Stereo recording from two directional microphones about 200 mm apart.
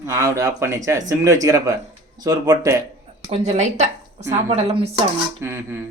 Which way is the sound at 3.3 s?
35° right (ahead or behind).